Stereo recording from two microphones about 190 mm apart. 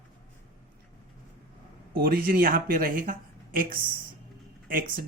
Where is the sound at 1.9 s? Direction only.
50° right (ahead or behind).